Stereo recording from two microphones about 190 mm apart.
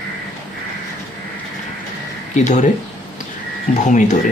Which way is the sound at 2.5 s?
40° left (ahead or behind).